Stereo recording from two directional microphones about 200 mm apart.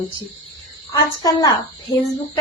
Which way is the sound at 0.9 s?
20° left (ahead or behind).